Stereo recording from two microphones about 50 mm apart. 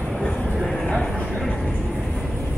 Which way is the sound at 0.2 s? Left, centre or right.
Centre.